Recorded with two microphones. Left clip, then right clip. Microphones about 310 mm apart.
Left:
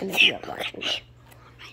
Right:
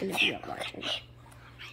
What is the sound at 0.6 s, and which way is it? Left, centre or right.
Speech, left.